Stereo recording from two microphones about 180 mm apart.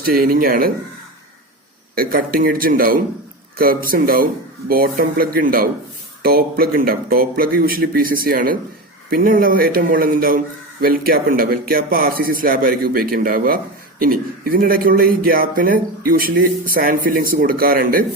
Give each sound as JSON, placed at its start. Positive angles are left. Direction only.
{"t": 0.0, "sound": "speech", "side_deg": -55}
{"t": 2.0, "sound": "a man's voice", "side_deg": -50}